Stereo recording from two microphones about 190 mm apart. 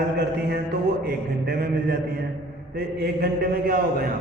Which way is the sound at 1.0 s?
50° right (ahead or behind).